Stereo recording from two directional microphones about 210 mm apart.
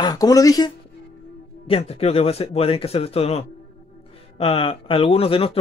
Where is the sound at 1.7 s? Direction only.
30° left (ahead or behind).